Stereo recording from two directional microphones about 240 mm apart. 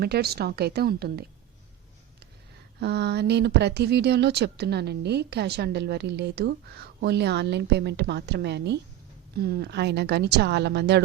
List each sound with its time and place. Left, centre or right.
0.0 s speech: right
2.8 s speech: right